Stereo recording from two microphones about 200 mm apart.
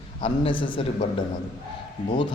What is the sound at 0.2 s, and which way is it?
Speech, 25° left (ahead or behind).